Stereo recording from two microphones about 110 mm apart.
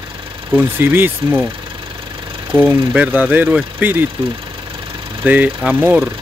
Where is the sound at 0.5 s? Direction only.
20° right (ahead or behind).